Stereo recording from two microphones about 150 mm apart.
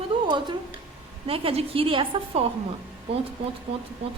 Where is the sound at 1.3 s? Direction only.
40° right (ahead or behind).